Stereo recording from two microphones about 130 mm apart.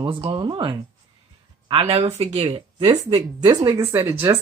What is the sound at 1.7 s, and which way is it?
Speech, 50° right (ahead or behind).